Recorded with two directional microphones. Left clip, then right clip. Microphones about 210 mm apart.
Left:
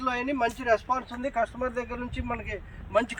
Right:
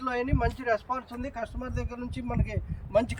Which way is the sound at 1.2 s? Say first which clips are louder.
Left 8 dB; 20° left (ahead or behind).